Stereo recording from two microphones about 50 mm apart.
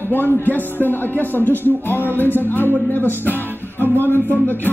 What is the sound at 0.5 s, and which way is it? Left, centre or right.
Speech, left.